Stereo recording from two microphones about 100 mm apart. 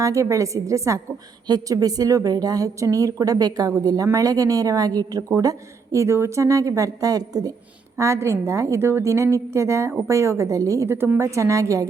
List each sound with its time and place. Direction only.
0.0 s a woman's voice: 35° right (ahead or behind)
7.9 s a woman's voice: 30° right (ahead or behind)